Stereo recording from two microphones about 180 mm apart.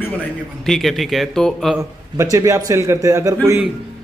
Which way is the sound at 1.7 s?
15° right (ahead or behind).